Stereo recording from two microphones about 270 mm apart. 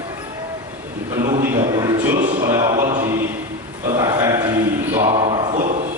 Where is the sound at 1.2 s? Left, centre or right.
Centre.